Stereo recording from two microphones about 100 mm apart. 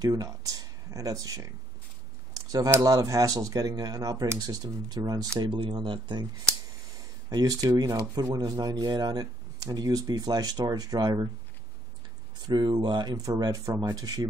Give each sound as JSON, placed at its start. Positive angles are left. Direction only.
{"t": 0.0, "sound": "speech", "side_deg": -35}
{"t": 5.4, "sound": "speech", "side_deg": -55}
{"t": 7.2, "sound": "speech", "side_deg": -40}
{"t": 12.4, "sound": "speech", "side_deg": -45}